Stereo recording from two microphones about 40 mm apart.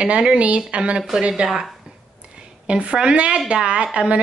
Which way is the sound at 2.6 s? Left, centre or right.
Right.